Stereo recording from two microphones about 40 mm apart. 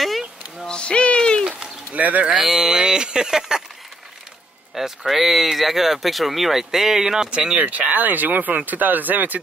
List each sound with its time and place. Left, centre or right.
0.7 s a sound: left
2.0 s speech: right
2.4 s speech: centre
4.7 s speech: centre
7.2 s speech: right
7.6 s speech: right